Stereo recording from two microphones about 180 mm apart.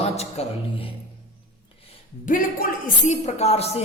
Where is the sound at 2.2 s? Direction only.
50° left (ahead or behind).